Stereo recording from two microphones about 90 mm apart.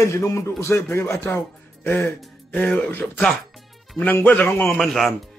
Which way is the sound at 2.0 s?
10° left (ahead or behind).